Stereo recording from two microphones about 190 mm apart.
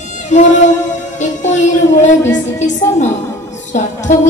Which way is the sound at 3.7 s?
40° left (ahead or behind).